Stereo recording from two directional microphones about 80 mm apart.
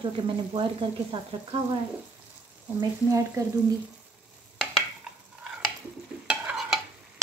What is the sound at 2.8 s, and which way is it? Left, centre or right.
Speech, right.